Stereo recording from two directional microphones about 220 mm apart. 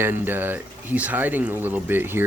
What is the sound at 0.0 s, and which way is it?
Speech, 10° right (ahead or behind).